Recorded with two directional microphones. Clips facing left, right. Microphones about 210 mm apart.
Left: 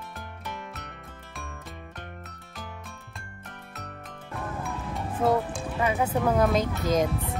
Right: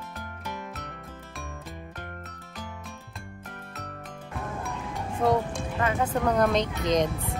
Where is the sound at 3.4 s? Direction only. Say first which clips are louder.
Right 1 dB; centre (ahead or behind).